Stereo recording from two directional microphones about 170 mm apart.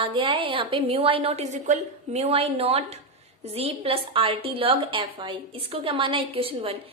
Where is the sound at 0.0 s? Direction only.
30° right (ahead or behind).